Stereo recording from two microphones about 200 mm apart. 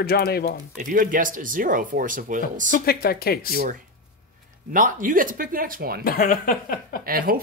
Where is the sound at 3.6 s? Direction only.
45° right (ahead or behind).